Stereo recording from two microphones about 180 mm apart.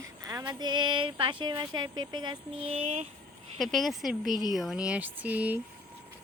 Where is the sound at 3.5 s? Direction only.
Centre (ahead or behind).